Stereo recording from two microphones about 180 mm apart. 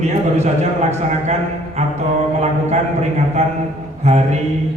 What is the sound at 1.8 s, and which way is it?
A man's voice, 35° right (ahead or behind).